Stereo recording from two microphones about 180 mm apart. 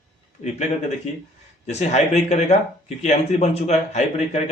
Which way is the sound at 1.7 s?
40° left (ahead or behind).